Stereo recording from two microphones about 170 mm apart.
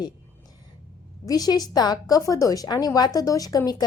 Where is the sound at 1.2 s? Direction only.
20° left (ahead or behind).